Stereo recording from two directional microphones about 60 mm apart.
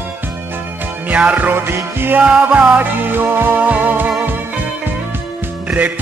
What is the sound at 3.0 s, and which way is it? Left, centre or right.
Music, right.